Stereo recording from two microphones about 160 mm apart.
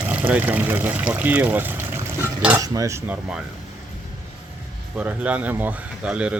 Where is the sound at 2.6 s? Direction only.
20° right (ahead or behind).